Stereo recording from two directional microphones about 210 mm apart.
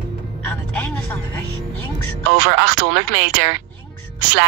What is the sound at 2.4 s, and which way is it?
Speech, 55° right (ahead or behind).